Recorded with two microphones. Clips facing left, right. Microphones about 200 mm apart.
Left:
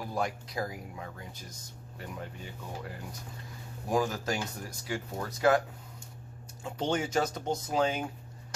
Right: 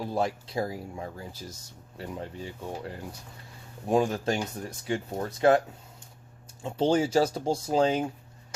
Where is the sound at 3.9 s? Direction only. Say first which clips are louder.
Right 5 dB; 25° right (ahead or behind).